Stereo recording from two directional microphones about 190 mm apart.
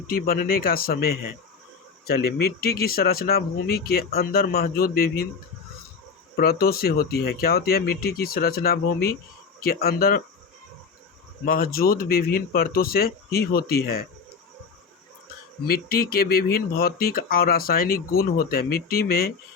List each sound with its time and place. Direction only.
0.1 s speech: 50° left (ahead or behind)
6.3 s speech: 55° left (ahead or behind)
11.4 s speech: 50° left (ahead or behind)
15.6 s speech: 55° left (ahead or behind)